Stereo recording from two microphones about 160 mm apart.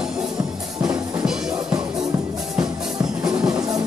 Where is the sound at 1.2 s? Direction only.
5° right (ahead or behind).